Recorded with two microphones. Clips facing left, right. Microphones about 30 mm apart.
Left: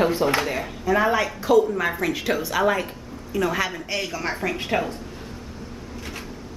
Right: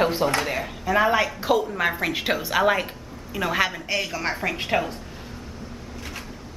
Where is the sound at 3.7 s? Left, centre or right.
Centre.